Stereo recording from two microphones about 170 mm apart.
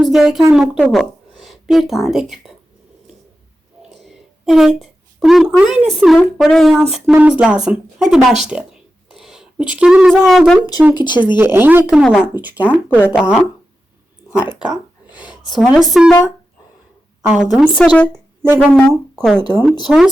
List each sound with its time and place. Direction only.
0.0 s a woman's voice: 5° right (ahead or behind)
3.8 s a sound: centre (ahead or behind)
6.1 s speech: centre (ahead or behind)
10.9 s speech: 25° left (ahead or behind)
11.3 s speech: 15° right (ahead or behind)
12.6 s speech: 10° left (ahead or behind)
13.1 s speech: 5° right (ahead or behind)
15.4 s speech: centre (ahead or behind)
17.2 s speech: 5° right (ahead or behind)
18.1 s a sound: 10° right (ahead or behind)
18.8 s speech: centre (ahead or behind)